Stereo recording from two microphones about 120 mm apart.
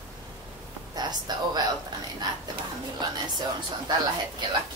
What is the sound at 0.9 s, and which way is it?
Speech, 35° right (ahead or behind).